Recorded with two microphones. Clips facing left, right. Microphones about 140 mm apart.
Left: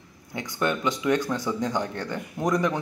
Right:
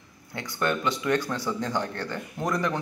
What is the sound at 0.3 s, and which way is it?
Speech, 15° left (ahead or behind).